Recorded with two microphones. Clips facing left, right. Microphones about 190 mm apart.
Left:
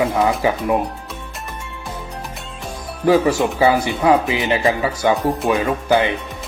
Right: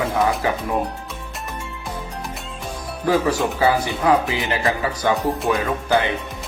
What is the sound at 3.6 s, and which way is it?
Speech, 25° left (ahead or behind).